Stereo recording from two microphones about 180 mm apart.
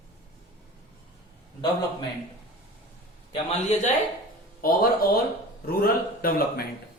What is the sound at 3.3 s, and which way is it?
Speech, 40° left (ahead or behind).